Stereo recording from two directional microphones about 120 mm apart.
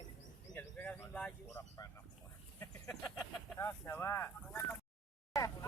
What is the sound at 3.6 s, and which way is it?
Speech, 20° left (ahead or behind).